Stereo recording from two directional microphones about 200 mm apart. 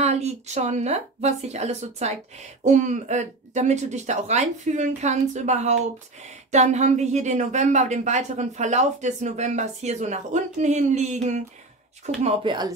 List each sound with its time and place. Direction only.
0.0 s speech: 35° right (ahead or behind)